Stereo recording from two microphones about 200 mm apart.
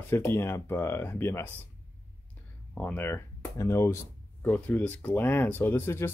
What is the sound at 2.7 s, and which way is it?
Speech, 10° left (ahead or behind).